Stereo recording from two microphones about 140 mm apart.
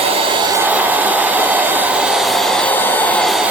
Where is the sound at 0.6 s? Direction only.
10° right (ahead or behind); by 3.2 s 10° left (ahead or behind).